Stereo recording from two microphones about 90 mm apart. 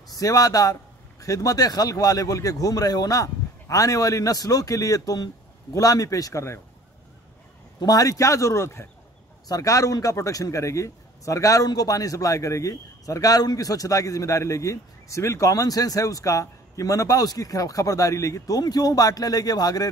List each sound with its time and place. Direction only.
0.2 s a man's voice: 40° left (ahead or behind)
7.8 s a man's voice: 45° left (ahead or behind)